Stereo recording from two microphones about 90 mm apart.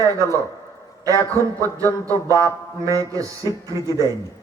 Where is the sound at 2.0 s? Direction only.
30° left (ahead or behind).